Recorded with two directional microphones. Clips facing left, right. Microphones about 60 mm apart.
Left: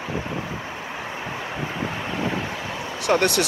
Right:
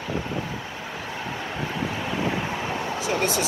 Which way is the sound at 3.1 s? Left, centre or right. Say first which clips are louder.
Left 6 dB; left.